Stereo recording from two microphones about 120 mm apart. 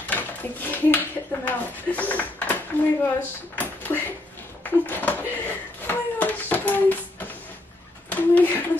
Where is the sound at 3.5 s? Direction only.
15° left (ahead or behind).